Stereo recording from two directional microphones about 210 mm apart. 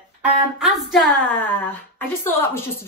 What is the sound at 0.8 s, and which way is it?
Speech, centre (ahead or behind).